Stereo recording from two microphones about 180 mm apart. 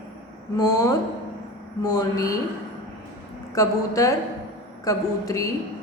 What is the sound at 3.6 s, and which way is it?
A woman's voice, 20° left (ahead or behind).